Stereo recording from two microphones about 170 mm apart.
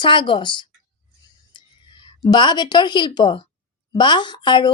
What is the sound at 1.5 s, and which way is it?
Whispering, 25° left (ahead or behind).